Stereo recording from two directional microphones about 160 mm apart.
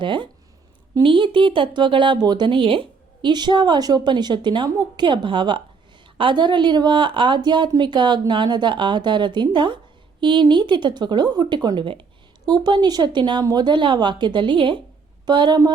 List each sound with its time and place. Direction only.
0.0 s a woman's voice: 30° right (ahead or behind)